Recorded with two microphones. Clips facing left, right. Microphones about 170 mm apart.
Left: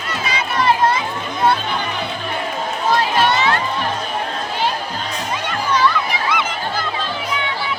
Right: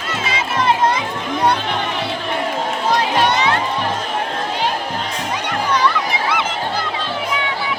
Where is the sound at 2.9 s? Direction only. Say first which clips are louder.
Even; 20° right (ahead or behind).